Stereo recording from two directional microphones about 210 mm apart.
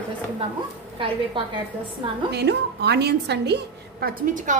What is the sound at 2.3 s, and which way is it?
A woman's voice, 50° right (ahead or behind).